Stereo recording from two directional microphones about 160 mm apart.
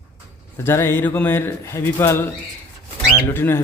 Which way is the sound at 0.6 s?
15° left (ahead or behind).